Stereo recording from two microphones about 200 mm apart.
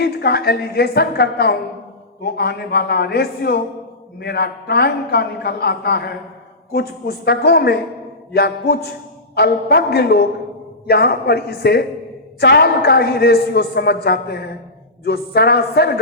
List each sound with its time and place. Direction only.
0.0 s a woman's voice: 55° left (ahead or behind)